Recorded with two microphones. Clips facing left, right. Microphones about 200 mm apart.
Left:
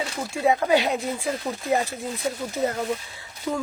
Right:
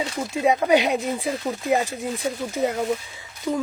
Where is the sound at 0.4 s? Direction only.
20° right (ahead or behind).